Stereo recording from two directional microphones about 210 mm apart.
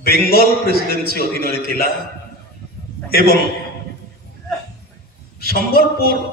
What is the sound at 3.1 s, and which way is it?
Speech, 45° left (ahead or behind).